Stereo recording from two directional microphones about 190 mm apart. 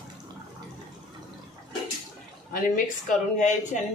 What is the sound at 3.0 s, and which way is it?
Speech, 40° left (ahead or behind).